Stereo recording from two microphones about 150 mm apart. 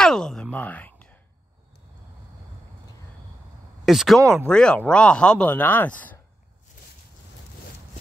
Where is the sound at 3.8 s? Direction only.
Centre (ahead or behind).